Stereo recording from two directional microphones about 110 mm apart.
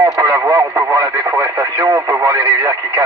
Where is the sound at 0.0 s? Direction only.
25° right (ahead or behind).